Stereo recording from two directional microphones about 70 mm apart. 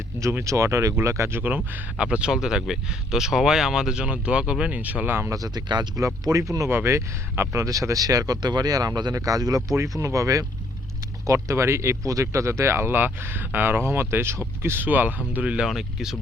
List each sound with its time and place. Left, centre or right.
0.4 s speech: right
1.4 s speech: right
2.0 s speech: centre; by 5.3 s right
5.3 s speech: right
6.2 s speech: right
6.7 s speech: right
8.4 s speech: right
10.0 s speech: right
14.8 s speech: right
15.6 s speech: centre